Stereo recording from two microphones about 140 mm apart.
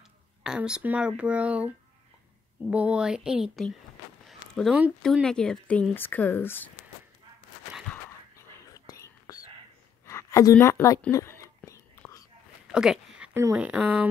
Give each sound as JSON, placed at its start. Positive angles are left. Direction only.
{"t": 0.4, "sound": "speech", "side_deg": -5}
{"t": 4.3, "sound": "a sound", "side_deg": 0}
{"t": 5.0, "sound": "speech", "side_deg": 5}
{"t": 8.6, "sound": "whispering", "side_deg": 25}
{"t": 10.0, "sound": "a sound", "side_deg": 20}
{"t": 10.6, "sound": "speech", "side_deg": 20}
{"t": 11.1, "sound": "whispering", "side_deg": 20}
{"t": 12.7, "sound": "a sound", "side_deg": -5}
{"t": 13.6, "sound": "speech", "side_deg": -10}